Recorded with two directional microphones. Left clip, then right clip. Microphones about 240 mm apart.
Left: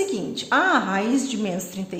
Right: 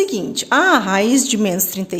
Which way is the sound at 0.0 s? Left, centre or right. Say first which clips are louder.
Right 6 dB; right.